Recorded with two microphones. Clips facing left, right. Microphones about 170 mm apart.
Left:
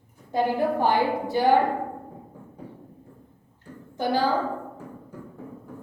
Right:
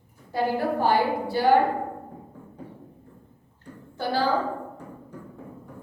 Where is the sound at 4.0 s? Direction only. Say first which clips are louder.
Left 3 dB; 15° left (ahead or behind).